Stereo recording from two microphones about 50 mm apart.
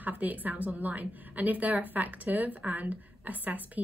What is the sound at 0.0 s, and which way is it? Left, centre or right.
A woman's voice, right.